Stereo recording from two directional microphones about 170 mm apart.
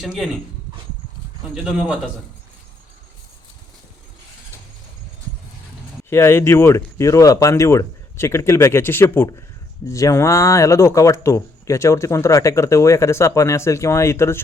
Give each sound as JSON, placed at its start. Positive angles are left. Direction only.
{"t": 0.0, "sound": "a man's voice", "side_deg": 0}
{"t": 1.6, "sound": "a man's voice", "side_deg": -5}
{"t": 6.1, "sound": "speech", "side_deg": 15}